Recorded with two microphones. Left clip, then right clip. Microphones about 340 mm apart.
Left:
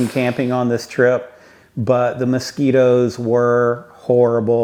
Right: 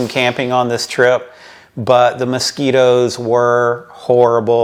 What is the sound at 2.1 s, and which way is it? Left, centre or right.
Speech, right.